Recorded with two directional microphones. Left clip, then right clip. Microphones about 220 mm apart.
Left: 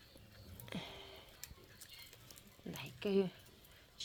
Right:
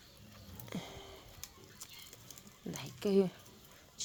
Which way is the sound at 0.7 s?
5° right (ahead or behind).